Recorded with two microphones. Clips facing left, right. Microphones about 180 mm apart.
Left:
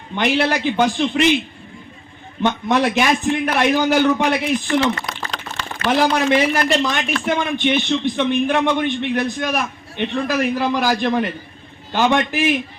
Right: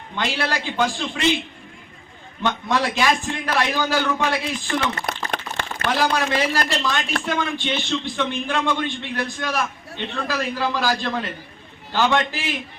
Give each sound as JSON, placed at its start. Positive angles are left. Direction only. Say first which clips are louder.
{"t": 0.2, "sound": "a man's voice", "louder": "left 7 dB", "side_deg": 20}
{"t": 2.4, "sound": "a man's voice", "louder": "left 5 dB", "side_deg": 20}
{"t": 5.3, "sound": "a sound", "louder": "right 1 dB", "side_deg": -55}
{"t": 5.9, "sound": "a man's voice", "louder": "left 6 dB", "side_deg": 20}